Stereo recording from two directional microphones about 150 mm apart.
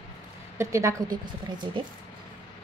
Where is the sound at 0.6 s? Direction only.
20° right (ahead or behind).